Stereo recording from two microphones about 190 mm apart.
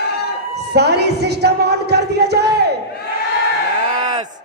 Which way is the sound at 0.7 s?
60° right (ahead or behind).